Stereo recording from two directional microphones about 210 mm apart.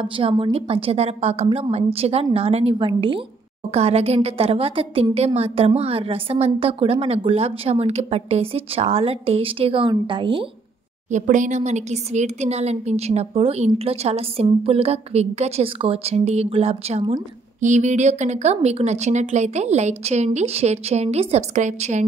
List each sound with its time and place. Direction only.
0.0 s speech: 25° right (ahead or behind)
11.1 s speech: 35° right (ahead or behind)